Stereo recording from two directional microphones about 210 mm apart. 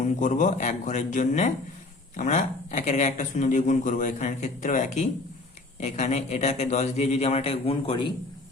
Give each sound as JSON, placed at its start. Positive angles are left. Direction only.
{"t": 0.0, "sound": "speech", "side_deg": 35}